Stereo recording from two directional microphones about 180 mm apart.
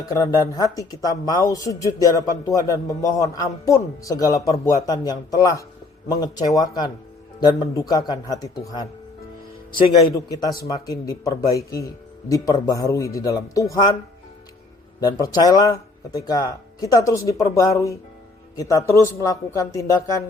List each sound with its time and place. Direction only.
0.0 s speech: 20° left (ahead or behind)
10.1 s speech: 20° left (ahead or behind)
15.0 s speech: 20° left (ahead or behind)